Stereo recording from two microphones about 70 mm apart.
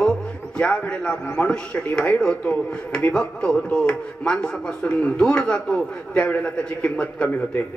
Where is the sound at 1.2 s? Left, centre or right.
Left.